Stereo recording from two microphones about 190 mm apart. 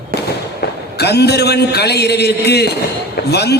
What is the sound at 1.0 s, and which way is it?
A man's voice, 60° left (ahead or behind).